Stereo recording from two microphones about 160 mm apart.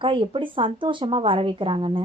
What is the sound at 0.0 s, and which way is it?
A woman's voice, 30° right (ahead or behind).